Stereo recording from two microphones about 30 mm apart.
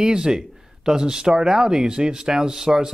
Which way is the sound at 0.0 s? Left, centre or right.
Right.